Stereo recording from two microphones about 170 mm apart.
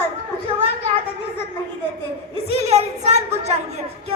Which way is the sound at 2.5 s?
40° right (ahead or behind).